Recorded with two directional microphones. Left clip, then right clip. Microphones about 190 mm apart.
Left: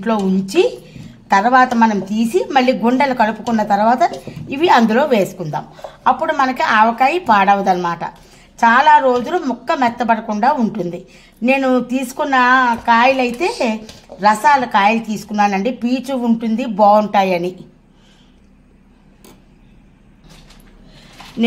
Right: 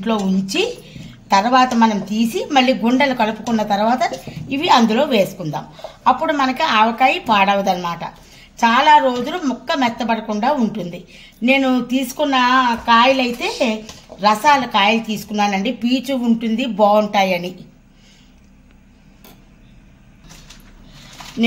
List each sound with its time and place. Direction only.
0.4 s a woman's voice: 20° left (ahead or behind)